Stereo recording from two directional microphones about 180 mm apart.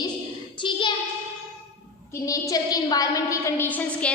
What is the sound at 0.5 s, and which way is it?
Child singing, 25° left (ahead or behind).